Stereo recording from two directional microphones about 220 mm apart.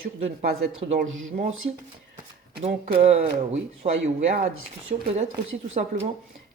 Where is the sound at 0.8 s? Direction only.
30° right (ahead or behind).